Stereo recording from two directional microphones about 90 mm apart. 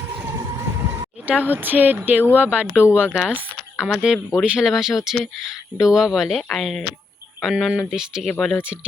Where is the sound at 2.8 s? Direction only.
30° left (ahead or behind).